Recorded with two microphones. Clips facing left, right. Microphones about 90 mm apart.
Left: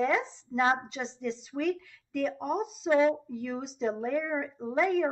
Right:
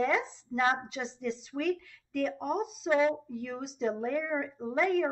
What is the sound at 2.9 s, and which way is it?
Speech, 20° left (ahead or behind).